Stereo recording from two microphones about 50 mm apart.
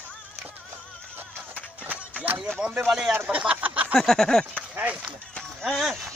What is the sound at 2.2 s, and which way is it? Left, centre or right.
Speech, right.